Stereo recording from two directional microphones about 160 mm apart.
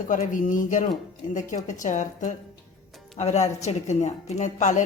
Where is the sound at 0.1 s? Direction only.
55° left (ahead or behind).